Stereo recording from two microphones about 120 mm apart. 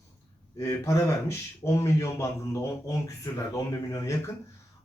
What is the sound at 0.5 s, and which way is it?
Speech, 25° left (ahead or behind).